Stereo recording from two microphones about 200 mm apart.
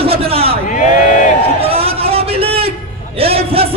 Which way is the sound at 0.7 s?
40° left (ahead or behind).